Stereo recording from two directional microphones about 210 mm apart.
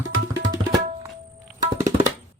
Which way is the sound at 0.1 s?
60° right (ahead or behind).